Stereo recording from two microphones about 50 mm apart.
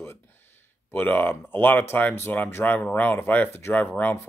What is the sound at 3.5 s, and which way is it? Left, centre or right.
Speech, left.